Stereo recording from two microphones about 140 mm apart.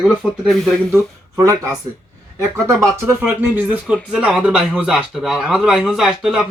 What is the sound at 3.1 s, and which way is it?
A man's voice, 15° right (ahead or behind).